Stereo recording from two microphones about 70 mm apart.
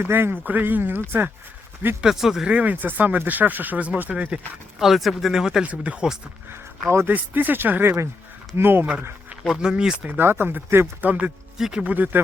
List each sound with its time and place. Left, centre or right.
0.0 s speech: right
2.0 s speech: centre
2.5 s speech: right
4.8 s speech: centre
7.1 s speech: right
9.6 s speech: centre
10.1 s speech: right
11.0 s speech: right
11.5 s speech: centre
11.8 s speech: right